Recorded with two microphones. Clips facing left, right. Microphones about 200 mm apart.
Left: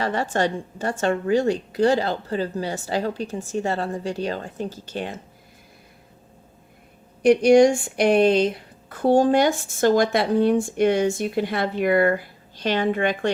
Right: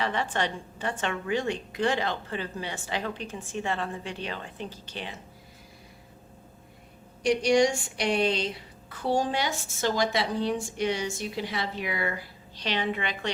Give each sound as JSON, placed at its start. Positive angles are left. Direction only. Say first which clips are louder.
{"t": 0.0, "sound": "a woman's voice", "louder": "left 6 dB", "side_deg": 45}
{"t": 7.2, "sound": "speech", "louder": "left 8 dB", "side_deg": 55}